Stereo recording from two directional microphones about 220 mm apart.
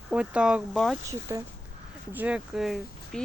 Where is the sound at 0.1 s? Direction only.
5° right (ahead or behind).